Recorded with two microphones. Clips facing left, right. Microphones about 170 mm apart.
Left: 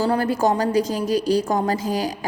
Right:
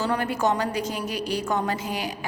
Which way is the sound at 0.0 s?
35° left (ahead or behind).